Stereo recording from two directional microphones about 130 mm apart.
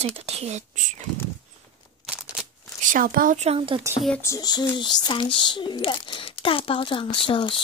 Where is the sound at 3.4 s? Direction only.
45° right (ahead or behind).